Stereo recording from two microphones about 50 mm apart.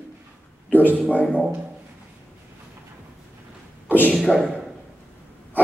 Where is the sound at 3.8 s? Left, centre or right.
Left.